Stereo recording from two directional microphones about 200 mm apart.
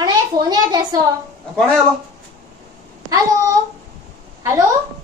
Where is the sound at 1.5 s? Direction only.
5° left (ahead or behind).